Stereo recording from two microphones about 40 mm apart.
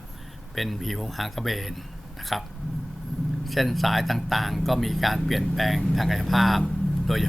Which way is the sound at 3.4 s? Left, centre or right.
Centre.